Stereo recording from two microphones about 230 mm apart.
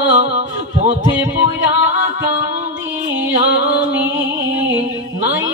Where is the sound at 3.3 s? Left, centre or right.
Right.